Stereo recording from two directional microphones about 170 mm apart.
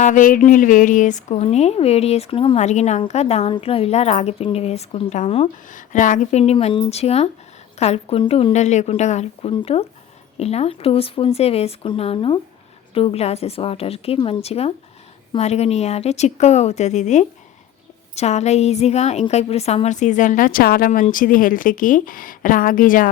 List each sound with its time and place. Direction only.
0.0 s a woman's voice: 50° left (ahead or behind)